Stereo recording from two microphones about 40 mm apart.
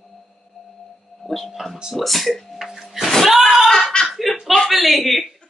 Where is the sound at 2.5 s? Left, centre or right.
Centre.